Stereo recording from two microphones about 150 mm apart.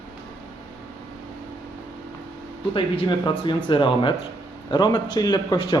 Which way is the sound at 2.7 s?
35° left (ahead or behind).